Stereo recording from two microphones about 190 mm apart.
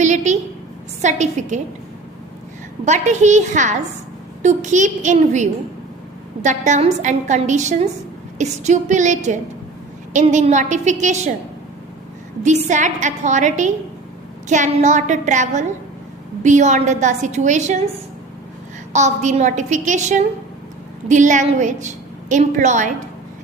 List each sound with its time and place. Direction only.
0.0 s a sound: 40° right (ahead or behind)
1.0 s a woman's voice: 40° right (ahead or behind)
2.8 s a woman's voice: 40° right (ahead or behind)
12.6 s a woman's voice: 40° right (ahead or behind)
18.9 s a woman's voice: 40° right (ahead or behind)